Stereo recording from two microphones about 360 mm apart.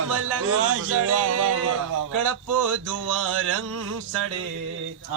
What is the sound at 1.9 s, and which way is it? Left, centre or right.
Music, right.